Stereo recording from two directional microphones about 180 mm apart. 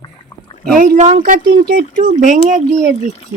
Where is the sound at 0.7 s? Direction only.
45° right (ahead or behind).